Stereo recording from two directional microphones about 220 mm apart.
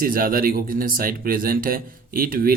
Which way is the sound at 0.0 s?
40° right (ahead or behind).